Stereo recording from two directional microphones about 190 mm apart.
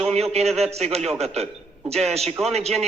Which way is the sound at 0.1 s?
35° right (ahead or behind).